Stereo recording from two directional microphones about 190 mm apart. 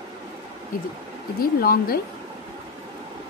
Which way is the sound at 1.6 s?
50° left (ahead or behind).